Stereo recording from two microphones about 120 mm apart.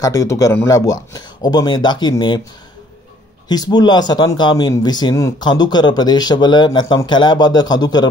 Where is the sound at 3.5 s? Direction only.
35° left (ahead or behind).